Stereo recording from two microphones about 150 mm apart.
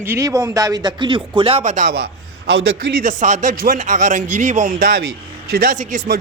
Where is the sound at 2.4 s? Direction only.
75° right (ahead or behind).